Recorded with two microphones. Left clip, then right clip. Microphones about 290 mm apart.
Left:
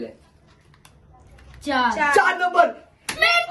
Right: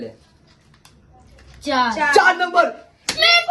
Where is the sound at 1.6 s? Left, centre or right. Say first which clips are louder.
Right 2 dB; centre.